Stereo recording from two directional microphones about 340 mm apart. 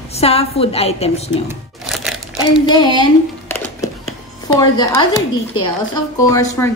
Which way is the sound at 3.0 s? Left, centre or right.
Centre.